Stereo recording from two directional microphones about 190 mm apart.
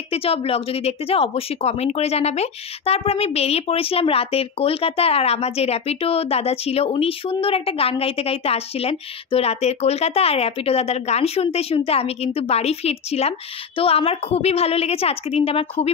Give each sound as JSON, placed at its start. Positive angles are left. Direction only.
{"t": 0.1, "sound": "speech", "side_deg": 30}